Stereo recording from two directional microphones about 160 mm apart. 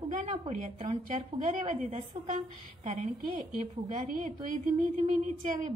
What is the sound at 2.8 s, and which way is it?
Speech, 45° right (ahead or behind).